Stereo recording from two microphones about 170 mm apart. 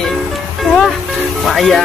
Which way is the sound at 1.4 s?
Centre (ahead or behind).